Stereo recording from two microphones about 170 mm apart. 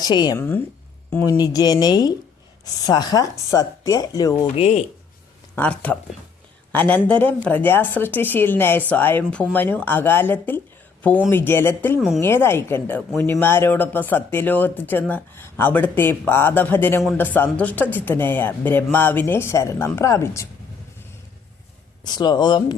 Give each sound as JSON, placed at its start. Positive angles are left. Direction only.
{"t": 0.0, "sound": "speech", "side_deg": 25}
{"t": 0.3, "sound": "speech", "side_deg": 10}
{"t": 4.4, "sound": "speech", "side_deg": 40}
{"t": 5.5, "sound": "speech", "side_deg": 10}
{"t": 11.9, "sound": "a woman's voice", "side_deg": 0}
{"t": 12.2, "sound": "speech", "side_deg": 15}
{"t": 22.0, "sound": "speech", "side_deg": 25}